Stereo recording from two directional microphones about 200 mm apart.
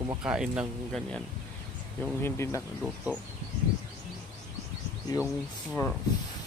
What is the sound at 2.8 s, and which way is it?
Speech, 5° right (ahead or behind).